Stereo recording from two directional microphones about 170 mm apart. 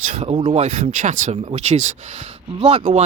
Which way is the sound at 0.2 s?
35° right (ahead or behind).